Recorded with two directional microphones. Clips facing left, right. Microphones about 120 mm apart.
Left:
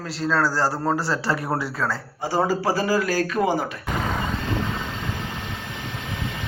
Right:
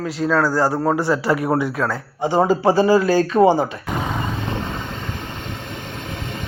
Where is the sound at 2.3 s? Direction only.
20° right (ahead or behind).